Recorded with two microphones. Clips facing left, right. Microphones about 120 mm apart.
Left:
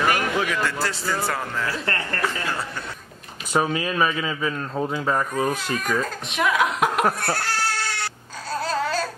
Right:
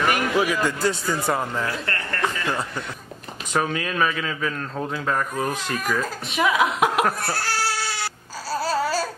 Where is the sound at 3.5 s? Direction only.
5° left (ahead or behind).